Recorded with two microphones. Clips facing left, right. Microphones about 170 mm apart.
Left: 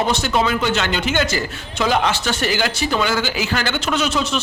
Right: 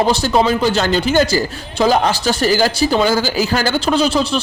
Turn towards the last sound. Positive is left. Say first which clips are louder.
# right 5 dB
turn(degrees=-35)  # may be behind; listen again after turning